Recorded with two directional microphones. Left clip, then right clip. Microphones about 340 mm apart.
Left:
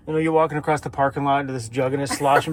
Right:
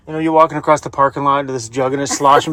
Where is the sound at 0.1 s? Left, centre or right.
Centre.